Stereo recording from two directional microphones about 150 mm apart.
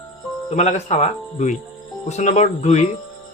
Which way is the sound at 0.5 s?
50° left (ahead or behind).